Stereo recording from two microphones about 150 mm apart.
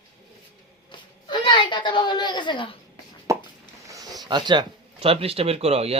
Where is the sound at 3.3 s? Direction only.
20° right (ahead or behind).